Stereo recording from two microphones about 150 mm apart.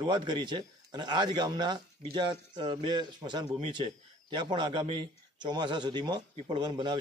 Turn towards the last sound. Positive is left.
turn(degrees=-30)  # may be behind; listen again after turning